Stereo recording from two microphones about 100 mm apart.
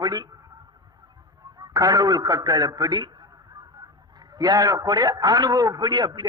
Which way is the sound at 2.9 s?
45° right (ahead or behind).